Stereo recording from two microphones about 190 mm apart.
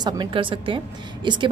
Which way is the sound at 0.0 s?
25° right (ahead or behind).